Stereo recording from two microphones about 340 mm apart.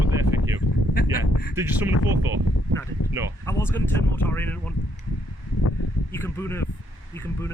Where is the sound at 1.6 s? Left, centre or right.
Centre.